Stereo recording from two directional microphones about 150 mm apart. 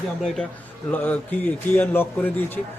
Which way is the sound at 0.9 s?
10° left (ahead or behind).